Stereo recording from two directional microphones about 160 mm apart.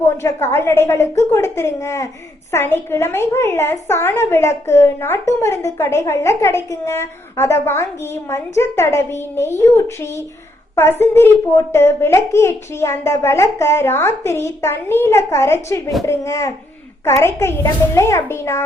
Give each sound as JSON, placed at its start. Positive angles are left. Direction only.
{"t": 0.0, "sound": "a woman's voice", "side_deg": 15}